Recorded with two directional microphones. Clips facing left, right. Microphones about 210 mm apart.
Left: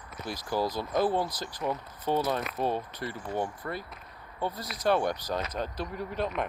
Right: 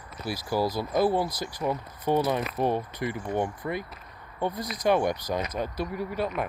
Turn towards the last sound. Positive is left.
turn(degrees=-5)  # may be behind; listen again after turning